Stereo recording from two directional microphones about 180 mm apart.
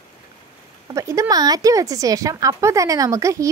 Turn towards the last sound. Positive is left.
turn(degrees=-15)  # may be behind; listen again after turning